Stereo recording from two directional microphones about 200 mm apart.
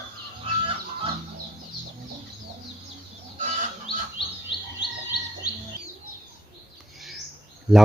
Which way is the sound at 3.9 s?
25° left (ahead or behind).